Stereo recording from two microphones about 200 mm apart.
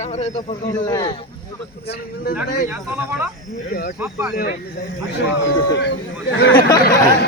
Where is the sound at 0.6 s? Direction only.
20° left (ahead or behind).